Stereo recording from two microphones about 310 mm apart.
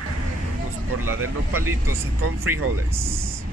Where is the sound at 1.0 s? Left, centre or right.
Right.